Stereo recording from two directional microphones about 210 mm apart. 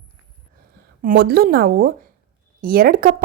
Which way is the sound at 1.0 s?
45° right (ahead or behind).